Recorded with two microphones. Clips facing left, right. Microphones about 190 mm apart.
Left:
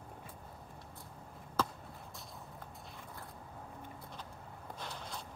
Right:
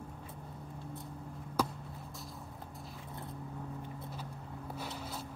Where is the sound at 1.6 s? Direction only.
10° right (ahead or behind).